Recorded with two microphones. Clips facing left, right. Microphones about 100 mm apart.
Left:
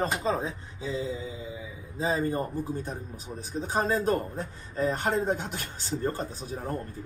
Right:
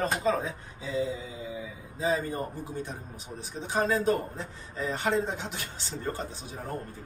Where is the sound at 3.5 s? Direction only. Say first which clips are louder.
Even; 40° left (ahead or behind).